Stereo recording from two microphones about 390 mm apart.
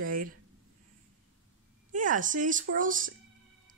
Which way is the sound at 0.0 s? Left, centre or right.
Right.